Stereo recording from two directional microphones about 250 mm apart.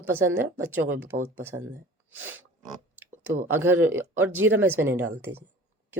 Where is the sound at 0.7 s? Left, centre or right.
Centre.